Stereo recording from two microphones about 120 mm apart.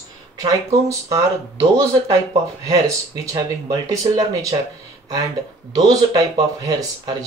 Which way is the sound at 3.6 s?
30° right (ahead or behind).